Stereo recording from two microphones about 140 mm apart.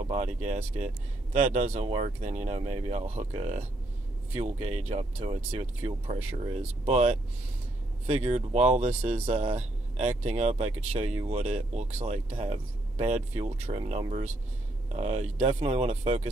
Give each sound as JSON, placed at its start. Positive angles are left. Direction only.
{"t": 0.1, "sound": "speech", "side_deg": -55}